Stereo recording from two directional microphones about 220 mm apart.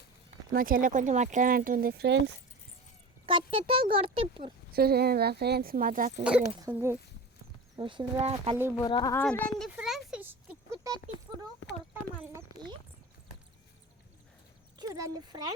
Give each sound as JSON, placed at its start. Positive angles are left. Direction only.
{"t": 0.5, "sound": "speech", "side_deg": -40}
{"t": 3.2, "sound": "speech", "side_deg": -25}
{"t": 4.7, "sound": "speech", "side_deg": -45}
{"t": 6.7, "sound": "speech", "side_deg": -10}
{"t": 7.8, "sound": "speech", "side_deg": -20}
{"t": 8.8, "sound": "speech", "side_deg": 20}
{"t": 9.1, "sound": "a sound", "side_deg": 5}
{"t": 12.2, "sound": "a sound", "side_deg": -15}
{"t": 14.8, "sound": "speech", "side_deg": -15}